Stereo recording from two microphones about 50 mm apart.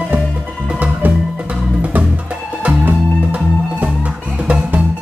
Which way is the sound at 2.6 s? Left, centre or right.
Right.